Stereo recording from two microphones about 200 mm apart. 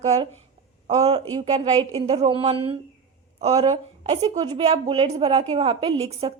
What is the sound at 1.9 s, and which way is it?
A woman's voice, 30° right (ahead or behind).